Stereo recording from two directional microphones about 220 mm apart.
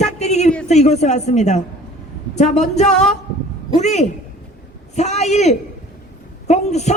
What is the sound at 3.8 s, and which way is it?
A man's voice, 30° left (ahead or behind).